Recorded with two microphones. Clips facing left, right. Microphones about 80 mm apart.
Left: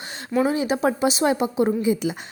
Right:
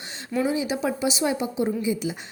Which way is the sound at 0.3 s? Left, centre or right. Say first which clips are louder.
Left 4 dB; left.